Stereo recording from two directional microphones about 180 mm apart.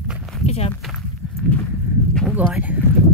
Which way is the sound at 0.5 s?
35° left (ahead or behind).